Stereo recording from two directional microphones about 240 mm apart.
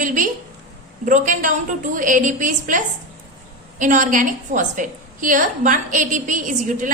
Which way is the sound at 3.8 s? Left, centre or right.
Right.